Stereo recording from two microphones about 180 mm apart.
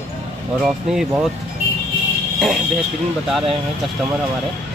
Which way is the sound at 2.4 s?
Centre (ahead or behind).